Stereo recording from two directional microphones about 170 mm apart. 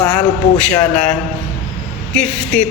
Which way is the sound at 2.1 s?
5° left (ahead or behind).